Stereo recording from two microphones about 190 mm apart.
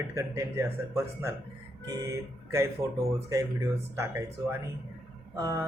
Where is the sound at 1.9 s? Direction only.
15° right (ahead or behind).